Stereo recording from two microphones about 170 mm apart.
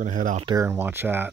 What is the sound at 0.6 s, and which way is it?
Speech, 15° right (ahead or behind).